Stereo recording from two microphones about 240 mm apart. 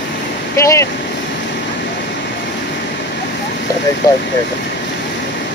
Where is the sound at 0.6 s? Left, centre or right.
Centre.